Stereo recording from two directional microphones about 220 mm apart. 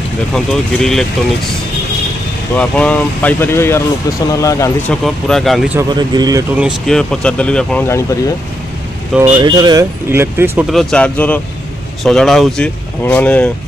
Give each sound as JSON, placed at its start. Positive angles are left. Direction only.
{"t": 0.3, "sound": "speech", "side_deg": 5}
{"t": 2.5, "sound": "speech", "side_deg": 5}
{"t": 5.0, "sound": "speech", "side_deg": 0}
{"t": 5.8, "sound": "speech", "side_deg": -20}
{"t": 6.6, "sound": "speech", "side_deg": 0}
{"t": 9.4, "sound": "speech", "side_deg": -20}
{"t": 10.7, "sound": "speech", "side_deg": 0}